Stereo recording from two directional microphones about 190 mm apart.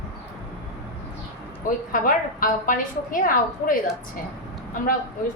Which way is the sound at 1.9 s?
45° left (ahead or behind).